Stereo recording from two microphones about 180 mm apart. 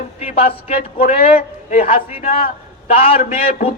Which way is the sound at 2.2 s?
35° left (ahead or behind).